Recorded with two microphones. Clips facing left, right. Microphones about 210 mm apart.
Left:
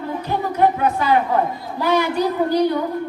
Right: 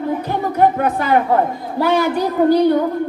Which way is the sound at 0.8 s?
50° right (ahead or behind).